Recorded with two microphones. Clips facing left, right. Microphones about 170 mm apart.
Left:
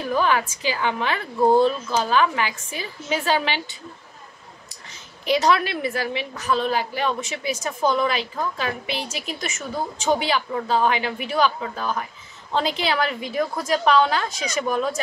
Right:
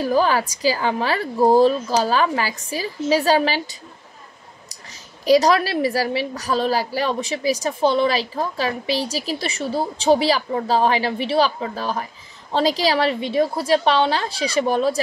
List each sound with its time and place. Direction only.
0.0 s a woman's voice: 35° right (ahead or behind)
5.2 s a woman's voice: 40° right (ahead or behind)